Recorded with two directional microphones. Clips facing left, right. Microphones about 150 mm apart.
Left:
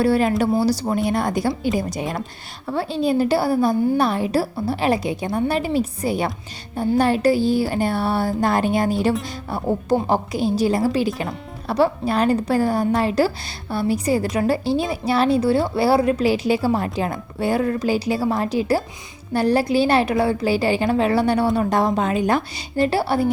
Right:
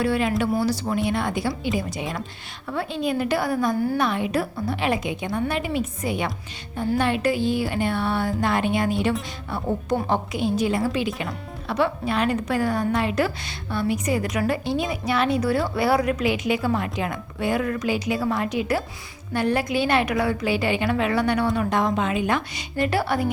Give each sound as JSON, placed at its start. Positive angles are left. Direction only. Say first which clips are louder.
{"t": 0.0, "sound": "speech", "louder": "left 4 dB", "side_deg": 40}